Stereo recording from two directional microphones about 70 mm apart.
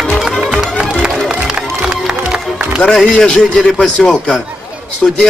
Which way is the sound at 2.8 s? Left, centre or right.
Centre.